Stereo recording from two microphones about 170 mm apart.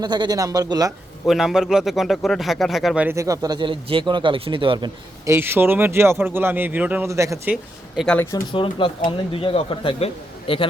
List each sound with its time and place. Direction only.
0.0 s speech: 25° right (ahead or behind)
1.3 s speech: centre (ahead or behind); by 4.9 s 30° right (ahead or behind)
5.2 s speech: 15° right (ahead or behind)
7.5 s speech: centre (ahead or behind)
8.5 s speech: 30° left (ahead or behind)